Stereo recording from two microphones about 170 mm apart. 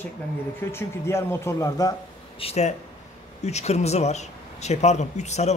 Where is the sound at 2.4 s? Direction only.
40° left (ahead or behind).